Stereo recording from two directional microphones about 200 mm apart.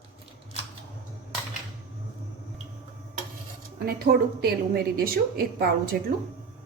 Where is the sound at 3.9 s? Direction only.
50° right (ahead or behind).